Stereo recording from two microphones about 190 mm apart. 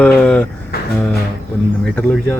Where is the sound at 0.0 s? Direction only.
5° left (ahead or behind).